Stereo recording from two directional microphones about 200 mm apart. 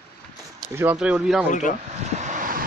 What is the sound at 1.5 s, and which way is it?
Speech, 40° left (ahead or behind).